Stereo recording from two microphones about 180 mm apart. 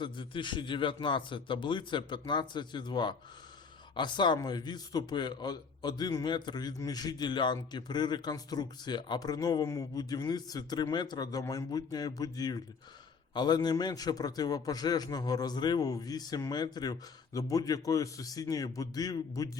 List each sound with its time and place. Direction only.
0.0 s a man's voice: 25° left (ahead or behind)